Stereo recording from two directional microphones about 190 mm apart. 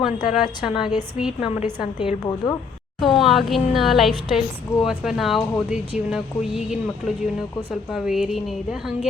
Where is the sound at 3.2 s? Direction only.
Centre (ahead or behind).